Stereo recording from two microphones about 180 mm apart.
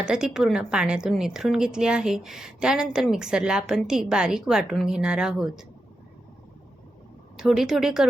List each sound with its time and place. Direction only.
0.0 s a woman's voice: 5° right (ahead or behind)
7.3 s a woman's voice: 5° right (ahead or behind)